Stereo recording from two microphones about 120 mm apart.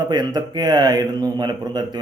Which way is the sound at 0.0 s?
35° right (ahead or behind).